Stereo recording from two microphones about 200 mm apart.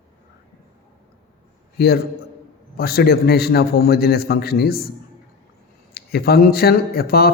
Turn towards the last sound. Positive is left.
turn(degrees=50)  # may be behind; listen again after turning